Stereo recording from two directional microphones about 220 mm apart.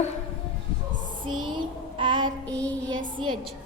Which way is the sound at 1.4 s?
20° right (ahead or behind).